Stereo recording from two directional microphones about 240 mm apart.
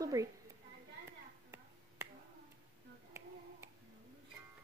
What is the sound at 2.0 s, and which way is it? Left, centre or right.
Finger snapping, centre.